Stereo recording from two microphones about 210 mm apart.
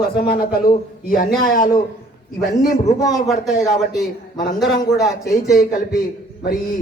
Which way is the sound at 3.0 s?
15° left (ahead or behind).